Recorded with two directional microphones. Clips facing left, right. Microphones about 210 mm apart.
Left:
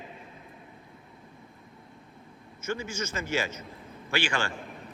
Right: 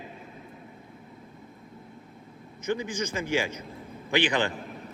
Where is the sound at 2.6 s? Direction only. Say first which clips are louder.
Right 4 dB; 15° right (ahead or behind).